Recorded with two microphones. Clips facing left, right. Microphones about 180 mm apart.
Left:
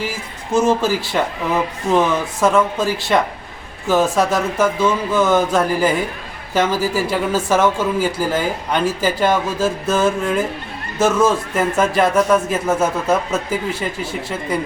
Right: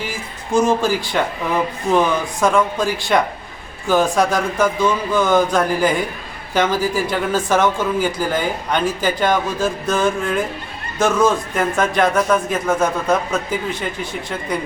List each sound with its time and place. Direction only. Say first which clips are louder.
0.5 s a man's voice: even; 5° left (ahead or behind)